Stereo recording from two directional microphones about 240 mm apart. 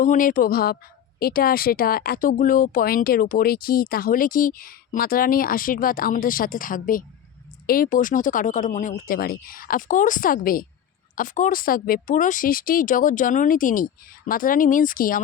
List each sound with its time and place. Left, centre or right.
0.0 s speech: left